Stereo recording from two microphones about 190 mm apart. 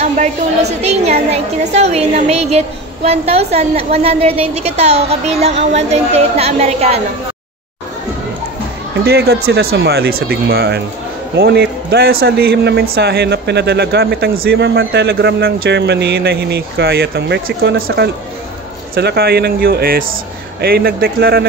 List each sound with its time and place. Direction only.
0.0 s a woman's voice: 35° right (ahead or behind)
9.0 s a man's voice: 55° right (ahead or behind)